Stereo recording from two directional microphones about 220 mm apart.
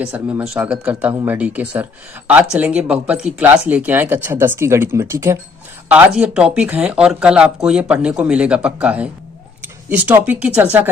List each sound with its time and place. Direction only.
0.0 s speech: 5° right (ahead or behind)